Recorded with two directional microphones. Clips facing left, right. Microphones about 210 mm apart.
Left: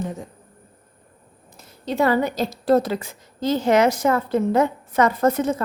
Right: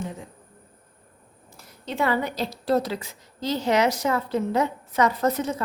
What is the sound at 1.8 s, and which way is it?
A woman's voice, 40° left (ahead or behind).